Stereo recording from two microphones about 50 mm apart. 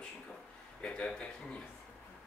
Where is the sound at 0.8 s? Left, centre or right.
Left.